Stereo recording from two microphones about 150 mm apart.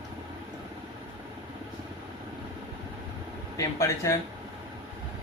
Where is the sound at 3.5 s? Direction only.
20° left (ahead or behind).